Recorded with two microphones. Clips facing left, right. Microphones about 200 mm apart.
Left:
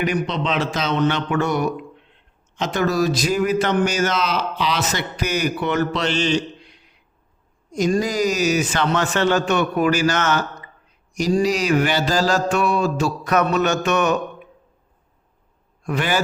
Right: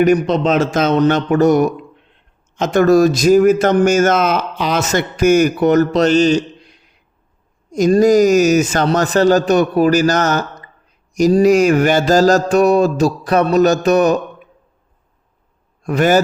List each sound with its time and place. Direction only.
0.0 s speech: 45° right (ahead or behind)
7.7 s mantra: 45° right (ahead or behind)
15.8 s a man's voice: 45° right (ahead or behind)